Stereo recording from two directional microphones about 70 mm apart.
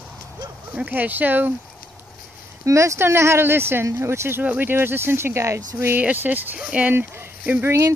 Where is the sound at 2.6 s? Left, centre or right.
Right.